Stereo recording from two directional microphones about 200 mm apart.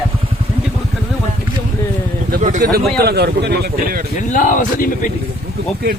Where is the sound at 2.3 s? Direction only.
40° right (ahead or behind).